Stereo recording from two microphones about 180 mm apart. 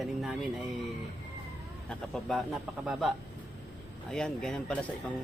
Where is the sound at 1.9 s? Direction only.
Centre (ahead or behind).